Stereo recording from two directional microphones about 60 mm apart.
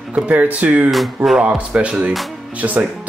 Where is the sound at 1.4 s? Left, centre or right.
Centre.